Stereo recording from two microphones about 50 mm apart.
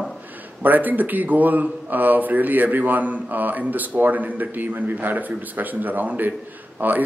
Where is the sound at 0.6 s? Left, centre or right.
Right.